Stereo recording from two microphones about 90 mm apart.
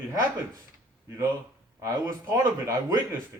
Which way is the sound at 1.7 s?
30° right (ahead or behind).